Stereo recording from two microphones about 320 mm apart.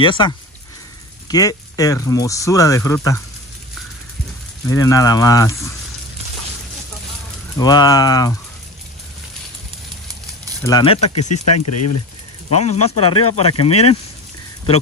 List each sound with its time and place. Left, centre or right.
0.0 s speech: centre
4.6 s speech: centre
7.5 s speech: centre
10.6 s speech: centre
11.3 s speech: left
12.4 s speech: left
13.7 s speech: left